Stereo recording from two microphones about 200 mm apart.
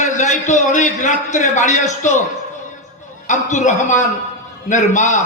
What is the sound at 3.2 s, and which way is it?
A man's voice, 40° left (ahead or behind).